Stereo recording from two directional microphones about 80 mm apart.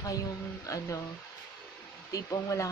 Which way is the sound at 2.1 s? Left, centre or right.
Left.